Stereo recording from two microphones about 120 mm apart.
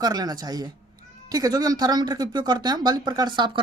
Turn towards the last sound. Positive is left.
turn(degrees=-40)  # may be behind; listen again after turning